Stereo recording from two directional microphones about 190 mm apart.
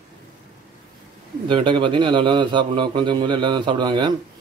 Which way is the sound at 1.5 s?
25° right (ahead or behind).